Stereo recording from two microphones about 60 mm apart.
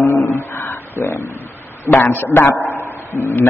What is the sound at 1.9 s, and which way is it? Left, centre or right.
Speech, left.